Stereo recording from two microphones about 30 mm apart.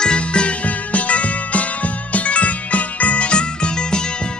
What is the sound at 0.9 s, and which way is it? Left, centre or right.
Music, left.